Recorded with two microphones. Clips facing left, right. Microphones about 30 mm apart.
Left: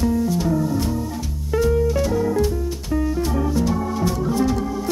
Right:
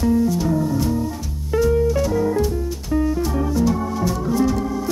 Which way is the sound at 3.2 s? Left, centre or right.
Centre.